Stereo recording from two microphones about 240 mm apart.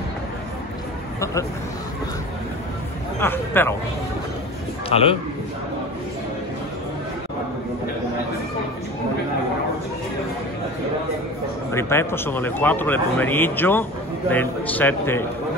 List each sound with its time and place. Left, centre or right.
3.2 s speech: centre
4.8 s a man's voice: left
11.7 s speech: centre